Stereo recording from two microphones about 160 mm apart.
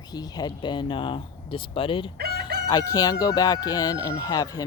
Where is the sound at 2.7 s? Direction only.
20° left (ahead or behind).